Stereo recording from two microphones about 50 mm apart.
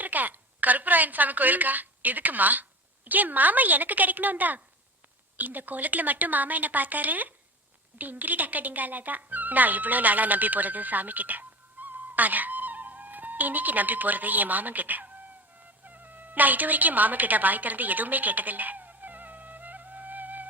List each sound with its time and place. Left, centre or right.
0.0 s a woman's voice: right
15.8 s music: right